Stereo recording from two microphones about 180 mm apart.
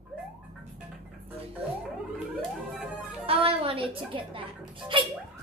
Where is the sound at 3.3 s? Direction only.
30° right (ahead or behind).